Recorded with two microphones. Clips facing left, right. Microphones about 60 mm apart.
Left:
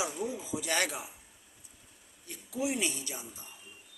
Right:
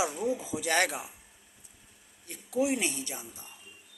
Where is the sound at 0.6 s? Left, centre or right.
Right.